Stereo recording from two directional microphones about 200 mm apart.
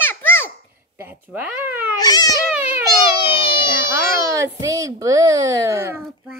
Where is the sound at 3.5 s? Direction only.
15° right (ahead or behind).